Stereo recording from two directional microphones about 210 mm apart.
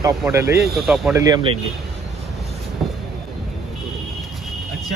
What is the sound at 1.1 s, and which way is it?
Speech, 20° right (ahead or behind).